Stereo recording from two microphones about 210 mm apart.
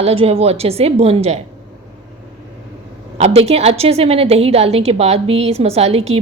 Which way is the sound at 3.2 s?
30° right (ahead or behind).